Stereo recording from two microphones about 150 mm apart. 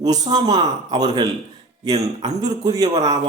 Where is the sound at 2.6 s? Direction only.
25° right (ahead or behind).